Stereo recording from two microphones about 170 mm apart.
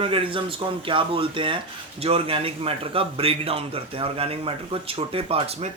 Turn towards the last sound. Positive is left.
turn(degrees=-35)  # may be behind; listen again after turning